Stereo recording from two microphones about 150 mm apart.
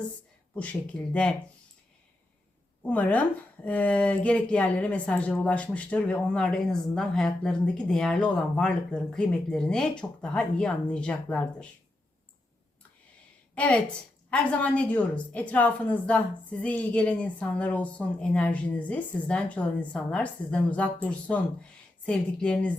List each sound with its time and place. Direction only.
0.5 s speech: 10° left (ahead or behind)
2.8 s speech: 10° left (ahead or behind)
13.6 s speech: 5° left (ahead or behind)